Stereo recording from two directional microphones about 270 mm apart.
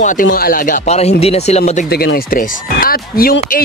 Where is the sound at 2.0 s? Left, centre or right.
Left.